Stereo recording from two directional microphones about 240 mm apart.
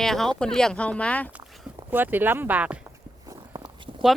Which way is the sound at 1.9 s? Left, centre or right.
Centre.